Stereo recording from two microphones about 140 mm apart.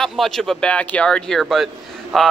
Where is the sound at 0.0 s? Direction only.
Centre (ahead or behind).